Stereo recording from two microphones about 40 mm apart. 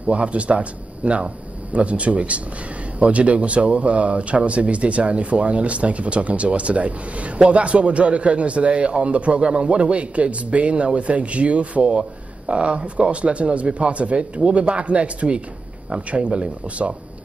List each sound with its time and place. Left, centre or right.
0.0 s speech: right